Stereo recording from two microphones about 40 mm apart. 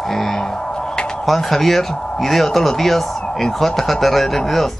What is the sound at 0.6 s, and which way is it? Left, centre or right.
Music, centre.